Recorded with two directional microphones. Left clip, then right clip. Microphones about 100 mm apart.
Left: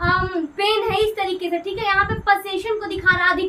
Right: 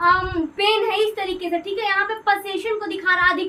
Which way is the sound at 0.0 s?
15° left (ahead or behind).